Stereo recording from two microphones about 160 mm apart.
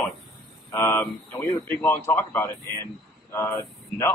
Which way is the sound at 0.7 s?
15° left (ahead or behind).